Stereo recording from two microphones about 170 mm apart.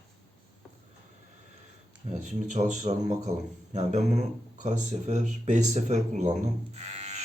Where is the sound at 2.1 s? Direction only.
45° right (ahead or behind).